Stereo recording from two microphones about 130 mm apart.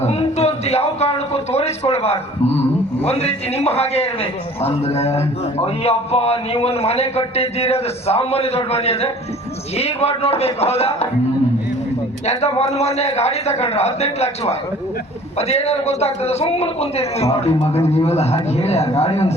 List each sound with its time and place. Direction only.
0.0 s a man's voice: 55° left (ahead or behind)
12.2 s a man's voice: 55° left (ahead or behind)